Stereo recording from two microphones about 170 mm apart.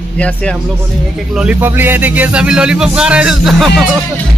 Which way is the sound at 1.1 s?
5° right (ahead or behind).